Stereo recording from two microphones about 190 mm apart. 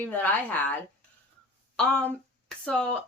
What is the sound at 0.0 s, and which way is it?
Speech, 10° left (ahead or behind).